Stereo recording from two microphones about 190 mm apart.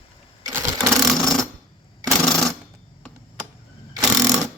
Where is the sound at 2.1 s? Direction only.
Centre (ahead or behind).